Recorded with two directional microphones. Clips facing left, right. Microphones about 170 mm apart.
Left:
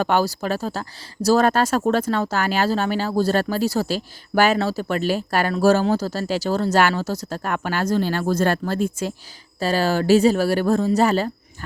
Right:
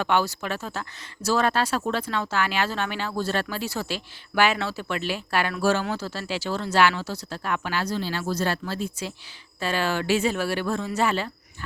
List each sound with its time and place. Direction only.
0.0 s speech: 40° left (ahead or behind)
9.6 s speech: 40° left (ahead or behind)